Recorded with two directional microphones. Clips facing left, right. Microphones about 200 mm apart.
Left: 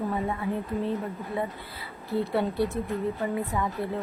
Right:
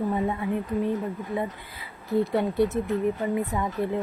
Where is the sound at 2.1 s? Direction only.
20° right (ahead or behind).